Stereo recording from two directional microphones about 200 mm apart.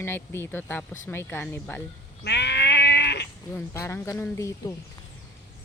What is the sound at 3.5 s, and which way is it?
Speech, 15° left (ahead or behind).